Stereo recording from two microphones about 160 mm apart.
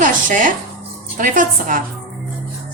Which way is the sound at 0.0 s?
55° right (ahead or behind).